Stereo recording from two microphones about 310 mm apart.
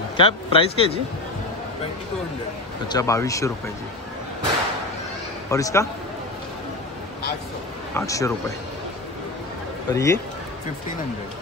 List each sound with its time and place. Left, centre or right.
0.2 s speech: centre
2.9 s speech: centre
5.5 s speech: centre
7.9 s speech: centre
9.9 s speech: centre